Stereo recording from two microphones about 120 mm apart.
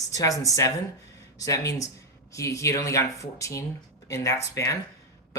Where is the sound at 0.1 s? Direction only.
30° left (ahead or behind).